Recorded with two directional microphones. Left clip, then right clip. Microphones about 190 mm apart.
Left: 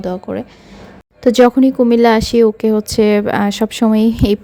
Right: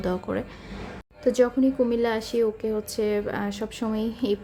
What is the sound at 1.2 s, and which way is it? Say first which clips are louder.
Speech: left 11 dB; 45° left (ahead or behind).